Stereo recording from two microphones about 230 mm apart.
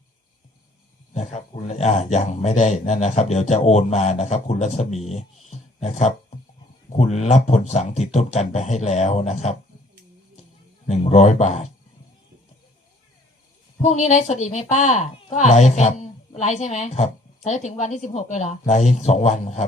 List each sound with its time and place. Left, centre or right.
1.1 s speech: left
10.8 s speech: left
13.8 s speech: left